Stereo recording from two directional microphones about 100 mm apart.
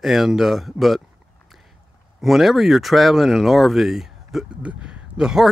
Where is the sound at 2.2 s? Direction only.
Centre (ahead or behind).